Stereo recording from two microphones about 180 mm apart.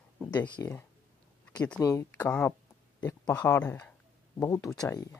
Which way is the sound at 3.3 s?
20° left (ahead or behind).